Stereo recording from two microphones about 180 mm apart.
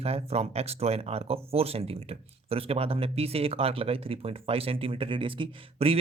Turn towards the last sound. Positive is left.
turn(degrees=-30)  # may be behind; listen again after turning